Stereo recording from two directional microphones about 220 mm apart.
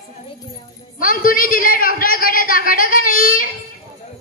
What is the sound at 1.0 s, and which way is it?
A man's voice, 40° left (ahead or behind).